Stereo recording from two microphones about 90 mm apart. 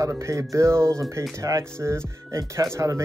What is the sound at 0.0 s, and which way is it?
Speech, 35° right (ahead or behind).